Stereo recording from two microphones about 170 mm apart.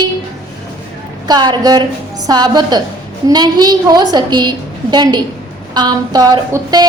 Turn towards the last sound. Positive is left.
turn(degrees=-25)  # may be behind; listen again after turning